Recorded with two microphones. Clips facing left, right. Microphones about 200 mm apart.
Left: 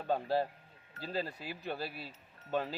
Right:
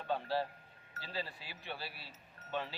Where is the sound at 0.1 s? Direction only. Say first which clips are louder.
Left 4 dB; 45° left (ahead or behind).